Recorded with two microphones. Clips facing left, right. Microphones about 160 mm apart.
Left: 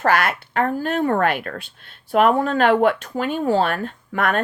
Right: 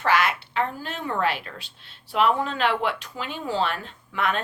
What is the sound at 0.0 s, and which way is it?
A woman's voice, 50° left (ahead or behind).